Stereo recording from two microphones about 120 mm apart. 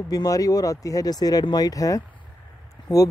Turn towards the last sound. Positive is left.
turn(degrees=35)  # may be behind; listen again after turning